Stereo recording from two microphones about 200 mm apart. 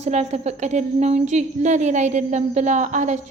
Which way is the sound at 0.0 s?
35° right (ahead or behind).